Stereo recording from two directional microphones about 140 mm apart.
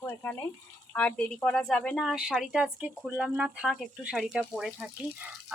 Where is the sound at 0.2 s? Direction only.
15° left (ahead or behind).